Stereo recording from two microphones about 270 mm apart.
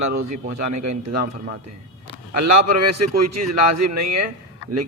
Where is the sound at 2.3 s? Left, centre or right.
Right.